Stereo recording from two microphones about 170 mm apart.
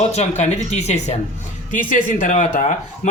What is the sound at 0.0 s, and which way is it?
A man's voice, 40° left (ahead or behind).